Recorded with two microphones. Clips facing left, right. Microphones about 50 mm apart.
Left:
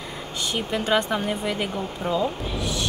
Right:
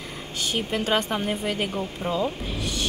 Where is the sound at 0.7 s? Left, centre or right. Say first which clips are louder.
Left 3 dB; right.